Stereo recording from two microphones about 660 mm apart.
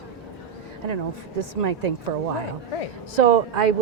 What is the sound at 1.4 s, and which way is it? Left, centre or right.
Speech, right.